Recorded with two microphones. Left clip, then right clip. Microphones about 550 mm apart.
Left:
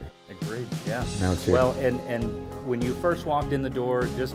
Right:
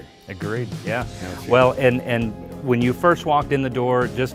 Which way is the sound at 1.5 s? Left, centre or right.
Right.